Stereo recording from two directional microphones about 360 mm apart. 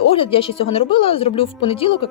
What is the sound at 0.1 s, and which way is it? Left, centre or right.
Speech, centre.